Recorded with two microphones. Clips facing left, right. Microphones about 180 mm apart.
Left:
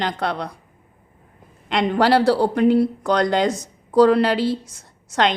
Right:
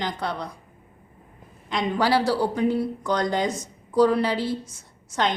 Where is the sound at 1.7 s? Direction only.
70° left (ahead or behind).